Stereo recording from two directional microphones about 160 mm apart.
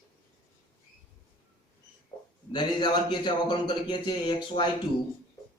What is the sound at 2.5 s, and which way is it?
Speech, 30° left (ahead or behind).